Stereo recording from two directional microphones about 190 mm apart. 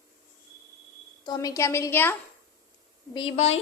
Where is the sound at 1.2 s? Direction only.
20° left (ahead or behind).